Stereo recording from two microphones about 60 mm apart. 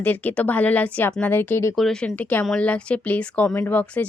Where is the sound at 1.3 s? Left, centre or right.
Left.